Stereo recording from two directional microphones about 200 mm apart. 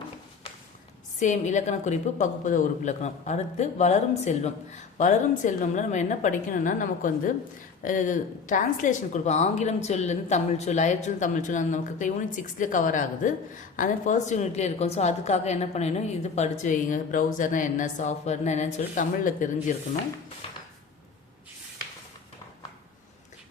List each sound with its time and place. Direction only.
1.2 s a woman's voice: 35° left (ahead or behind)